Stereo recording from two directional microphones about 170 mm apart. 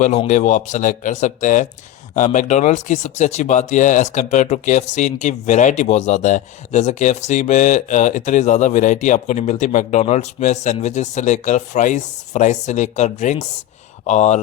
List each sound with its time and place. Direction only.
0.0 s speech: 45° left (ahead or behind)